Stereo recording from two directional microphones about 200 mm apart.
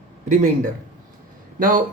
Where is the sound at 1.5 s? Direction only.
45° right (ahead or behind).